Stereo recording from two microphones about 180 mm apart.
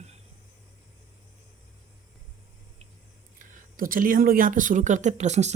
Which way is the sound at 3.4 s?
50° right (ahead or behind).